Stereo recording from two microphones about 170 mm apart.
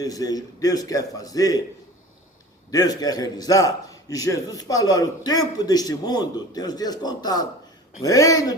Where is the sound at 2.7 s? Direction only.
20° left (ahead or behind).